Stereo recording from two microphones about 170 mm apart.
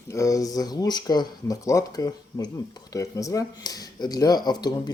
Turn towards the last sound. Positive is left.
turn(degrees=25)  # may be behind; listen again after turning